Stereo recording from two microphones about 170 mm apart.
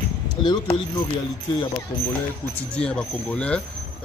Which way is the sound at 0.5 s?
25° left (ahead or behind).